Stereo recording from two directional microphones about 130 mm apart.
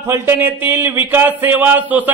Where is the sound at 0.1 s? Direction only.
20° right (ahead or behind).